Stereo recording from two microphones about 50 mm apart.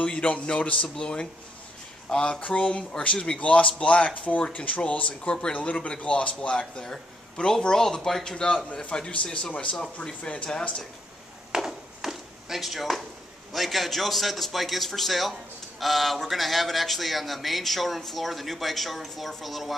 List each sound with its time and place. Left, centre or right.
0.0 s speech: left
11.5 s chop: centre
13.5 s speech: centre